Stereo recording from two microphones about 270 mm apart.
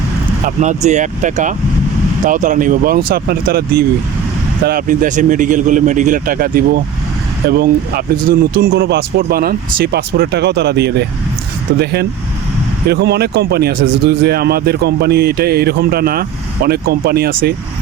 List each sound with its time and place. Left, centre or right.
0.4 s speech: right